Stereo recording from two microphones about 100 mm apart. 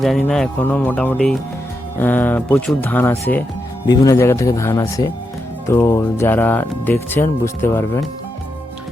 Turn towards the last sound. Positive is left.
turn(degrees=25)  # may be behind; listen again after turning